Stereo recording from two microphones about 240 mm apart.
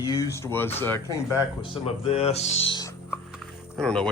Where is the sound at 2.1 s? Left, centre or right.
Left.